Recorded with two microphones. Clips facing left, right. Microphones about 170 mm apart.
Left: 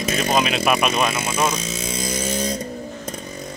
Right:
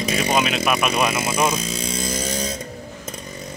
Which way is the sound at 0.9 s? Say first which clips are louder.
Right 1 dB; 10° right (ahead or behind).